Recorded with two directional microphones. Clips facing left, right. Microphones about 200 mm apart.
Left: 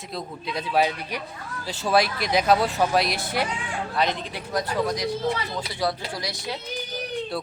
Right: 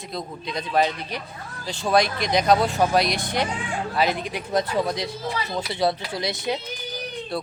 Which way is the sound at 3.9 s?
5° right (ahead or behind).